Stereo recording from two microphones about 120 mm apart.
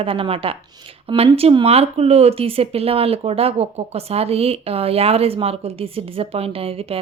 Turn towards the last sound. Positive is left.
turn(degrees=-55)  # may be behind; listen again after turning